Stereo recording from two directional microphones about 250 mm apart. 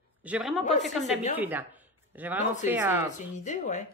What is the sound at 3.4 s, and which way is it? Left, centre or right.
Speech, left.